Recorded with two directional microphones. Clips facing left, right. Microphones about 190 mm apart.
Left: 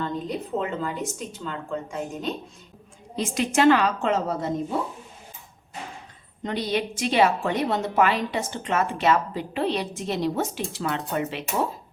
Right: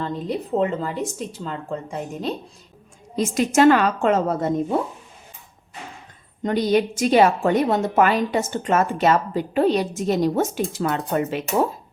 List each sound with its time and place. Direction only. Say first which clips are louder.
0.0 s a woman's voice: right 3 dB; 35° right (ahead or behind); by 4.5 s 50° right (ahead or behind)
6.4 s a woman's voice: right 7 dB; 45° right (ahead or behind)